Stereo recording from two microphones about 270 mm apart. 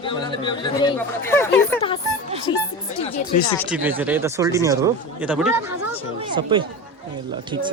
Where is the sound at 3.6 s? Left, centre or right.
Centre.